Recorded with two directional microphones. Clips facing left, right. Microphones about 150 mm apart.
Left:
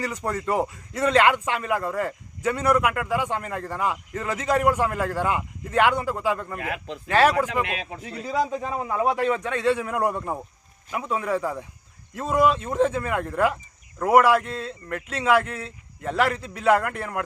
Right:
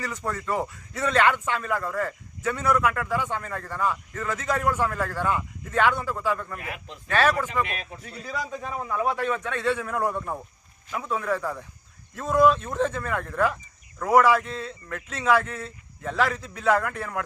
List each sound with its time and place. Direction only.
0.0 s a man's voice: 15° left (ahead or behind)
6.6 s a man's voice: 85° left
8.2 s a man's voice: 25° left (ahead or behind); by 17.2 s 10° left (ahead or behind)